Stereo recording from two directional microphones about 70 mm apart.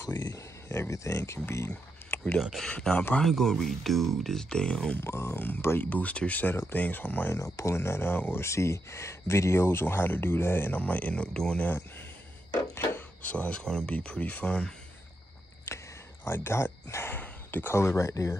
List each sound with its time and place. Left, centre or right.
0.7 s speech: left
2.6 s speech: centre
3.2 s speech: centre
5.0 s speech: left
7.3 s speech: left; by 11.7 s centre
12.7 s a sound: left
13.2 s speech: left
16.3 s speech: left